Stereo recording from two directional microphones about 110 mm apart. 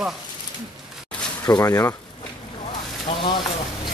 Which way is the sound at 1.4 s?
30° left (ahead or behind).